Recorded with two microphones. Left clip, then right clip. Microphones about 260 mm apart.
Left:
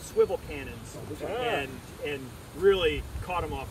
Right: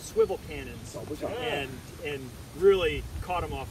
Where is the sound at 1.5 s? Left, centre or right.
Centre.